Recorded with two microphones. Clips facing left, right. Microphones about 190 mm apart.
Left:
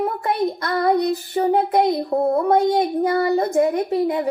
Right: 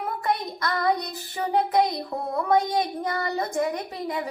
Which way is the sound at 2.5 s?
55° left (ahead or behind).